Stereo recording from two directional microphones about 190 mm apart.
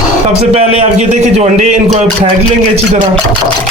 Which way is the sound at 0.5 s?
35° right (ahead or behind).